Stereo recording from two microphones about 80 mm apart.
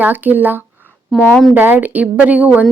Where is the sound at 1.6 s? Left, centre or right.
Right.